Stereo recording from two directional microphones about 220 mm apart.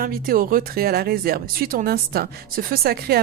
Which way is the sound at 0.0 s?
40° right (ahead or behind).